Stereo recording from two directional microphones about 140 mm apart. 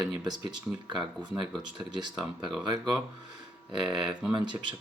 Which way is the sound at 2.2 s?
Centre (ahead or behind).